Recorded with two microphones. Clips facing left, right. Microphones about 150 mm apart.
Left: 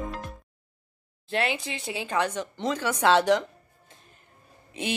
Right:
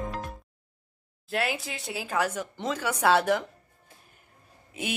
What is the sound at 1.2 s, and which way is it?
A woman's voice, 5° right (ahead or behind).